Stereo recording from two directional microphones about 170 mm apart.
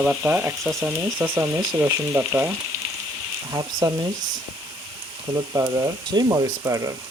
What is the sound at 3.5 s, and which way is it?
Speech, 20° right (ahead or behind).